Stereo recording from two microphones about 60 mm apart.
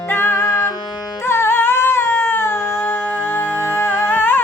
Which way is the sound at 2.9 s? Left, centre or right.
Left.